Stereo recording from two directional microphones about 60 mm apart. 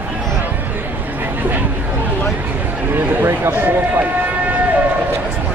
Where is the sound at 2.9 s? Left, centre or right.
Right.